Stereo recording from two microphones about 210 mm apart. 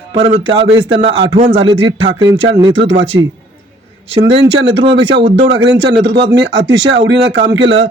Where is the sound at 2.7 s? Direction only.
60° right (ahead or behind).